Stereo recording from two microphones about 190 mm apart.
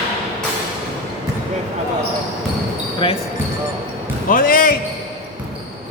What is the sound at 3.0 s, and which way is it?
Speech, 30° left (ahead or behind).